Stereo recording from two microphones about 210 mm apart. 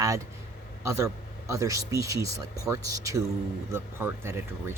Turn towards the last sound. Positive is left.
turn(degrees=-10)  # may be behind; listen again after turning